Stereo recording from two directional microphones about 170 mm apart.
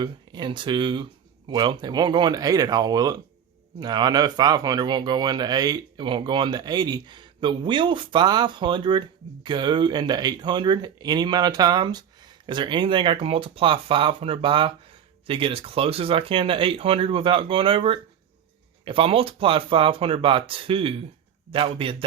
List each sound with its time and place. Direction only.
0.0 s speech: 25° right (ahead or behind)